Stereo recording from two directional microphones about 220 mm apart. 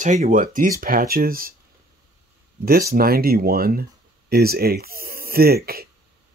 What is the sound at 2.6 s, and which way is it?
Speech, 40° right (ahead or behind).